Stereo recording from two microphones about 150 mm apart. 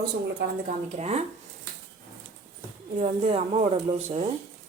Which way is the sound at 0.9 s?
45° right (ahead or behind).